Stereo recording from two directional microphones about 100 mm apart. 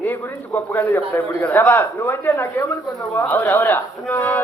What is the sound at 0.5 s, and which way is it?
Speech, 20° left (ahead or behind).